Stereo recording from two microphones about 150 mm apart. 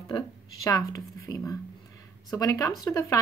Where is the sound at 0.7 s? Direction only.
25° left (ahead or behind).